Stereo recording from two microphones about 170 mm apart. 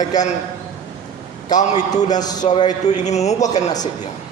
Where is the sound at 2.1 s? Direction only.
25° left (ahead or behind).